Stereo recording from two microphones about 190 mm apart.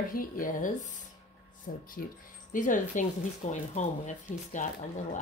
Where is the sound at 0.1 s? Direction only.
45° left (ahead or behind).